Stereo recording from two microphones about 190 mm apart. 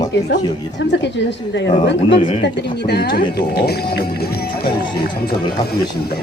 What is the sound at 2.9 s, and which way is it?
Speech, 55° left (ahead or behind).